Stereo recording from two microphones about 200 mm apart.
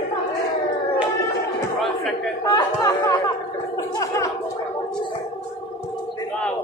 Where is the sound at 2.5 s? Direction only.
20° left (ahead or behind).